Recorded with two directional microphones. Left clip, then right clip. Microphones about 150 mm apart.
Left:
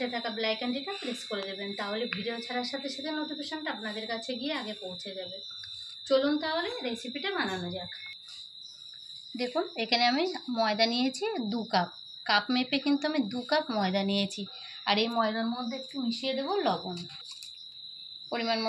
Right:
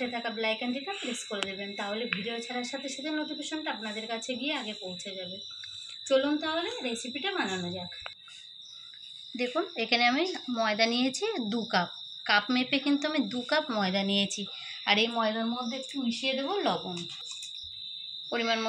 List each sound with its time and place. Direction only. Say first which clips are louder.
0.0 s speech: even; centre (ahead or behind)
3.0 s speech: right 1 dB; 5° right (ahead or behind)
6.0 s speech: even; centre (ahead or behind)
9.4 s a woman's voice: right 1 dB; 5° left (ahead or behind)
18.3 s speech: right 1 dB; centre (ahead or behind)